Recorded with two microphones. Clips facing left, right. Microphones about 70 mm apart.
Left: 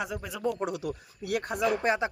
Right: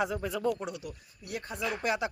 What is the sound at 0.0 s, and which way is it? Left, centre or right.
Speech, centre.